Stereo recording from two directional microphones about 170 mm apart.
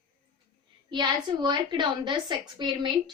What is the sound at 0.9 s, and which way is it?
A woman's voice, 25° right (ahead or behind).